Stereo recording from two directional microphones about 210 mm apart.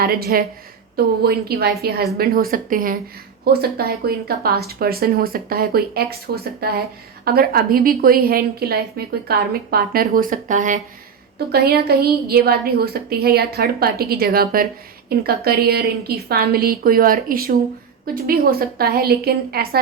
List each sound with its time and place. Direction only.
0.0 s a woman's voice: 45° right (ahead or behind)
11.5 s a woman's voice: 50° right (ahead or behind)